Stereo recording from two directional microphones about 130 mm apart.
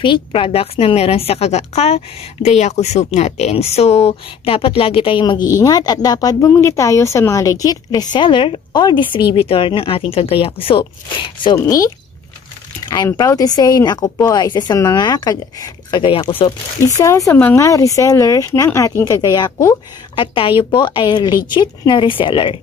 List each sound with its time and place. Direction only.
0.0 s a woman's voice: 40° left (ahead or behind)
17.3 s speech: 15° left (ahead or behind)
20.2 s speech: 45° left (ahead or behind)